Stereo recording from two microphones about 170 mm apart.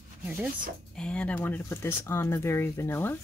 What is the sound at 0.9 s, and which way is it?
Speech, 5° left (ahead or behind).